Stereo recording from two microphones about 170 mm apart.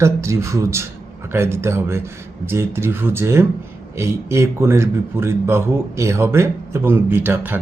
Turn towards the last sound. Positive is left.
turn(degrees=-10)  # may be behind; listen again after turning